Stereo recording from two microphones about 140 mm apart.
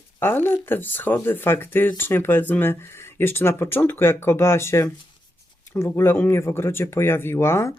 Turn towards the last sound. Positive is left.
turn(degrees=20)  # may be behind; listen again after turning